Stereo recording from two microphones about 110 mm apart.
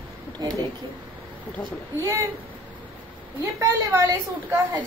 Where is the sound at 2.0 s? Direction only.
25° right (ahead or behind).